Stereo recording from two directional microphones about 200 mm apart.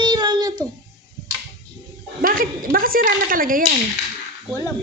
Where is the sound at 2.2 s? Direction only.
45° right (ahead or behind).